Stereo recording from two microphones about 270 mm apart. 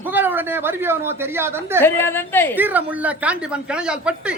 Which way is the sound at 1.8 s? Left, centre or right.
Centre.